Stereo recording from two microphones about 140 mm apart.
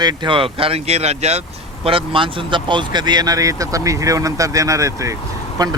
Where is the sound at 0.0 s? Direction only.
30° right (ahead or behind).